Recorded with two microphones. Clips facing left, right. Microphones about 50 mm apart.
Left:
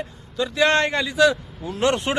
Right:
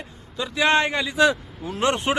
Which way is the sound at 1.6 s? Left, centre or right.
Centre.